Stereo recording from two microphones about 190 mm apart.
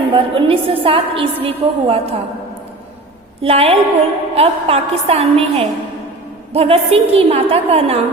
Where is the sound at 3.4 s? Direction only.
30° right (ahead or behind).